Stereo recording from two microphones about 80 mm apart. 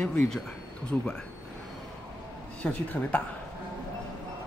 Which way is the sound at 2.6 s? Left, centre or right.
Centre.